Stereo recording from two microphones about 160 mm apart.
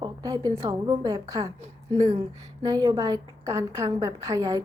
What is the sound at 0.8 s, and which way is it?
Speech, 30° right (ahead or behind).